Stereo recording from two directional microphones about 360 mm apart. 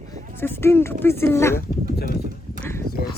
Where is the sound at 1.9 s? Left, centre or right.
Left.